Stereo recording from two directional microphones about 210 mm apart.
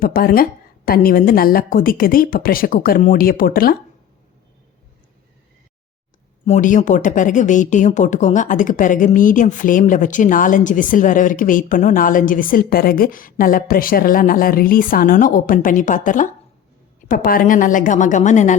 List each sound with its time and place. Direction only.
0.0 s a woman's voice: 45° left (ahead or behind)
6.4 s a woman's voice: 35° left (ahead or behind)